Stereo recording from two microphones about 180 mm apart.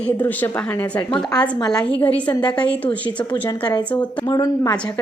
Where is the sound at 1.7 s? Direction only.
5° left (ahead or behind).